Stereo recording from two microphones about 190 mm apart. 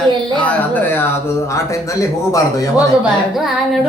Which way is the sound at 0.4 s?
10° left (ahead or behind).